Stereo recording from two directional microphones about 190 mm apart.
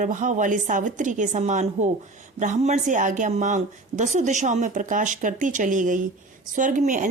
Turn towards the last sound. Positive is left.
turn(degrees=-40)  # may be behind; listen again after turning